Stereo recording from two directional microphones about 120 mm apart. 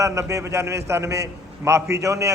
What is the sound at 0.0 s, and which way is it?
A man's voice, 25° right (ahead or behind).